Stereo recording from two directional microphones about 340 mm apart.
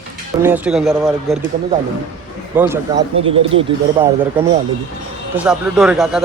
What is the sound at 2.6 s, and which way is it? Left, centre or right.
A man's voice, centre.